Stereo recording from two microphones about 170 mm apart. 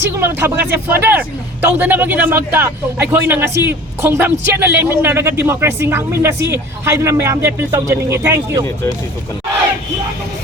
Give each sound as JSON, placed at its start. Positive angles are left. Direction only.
{"t": 0.1, "sound": "speech", "side_deg": -15}